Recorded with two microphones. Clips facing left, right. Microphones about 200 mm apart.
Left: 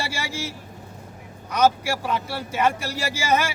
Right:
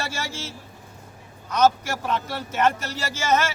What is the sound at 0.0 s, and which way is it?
Speech, 15° left (ahead or behind).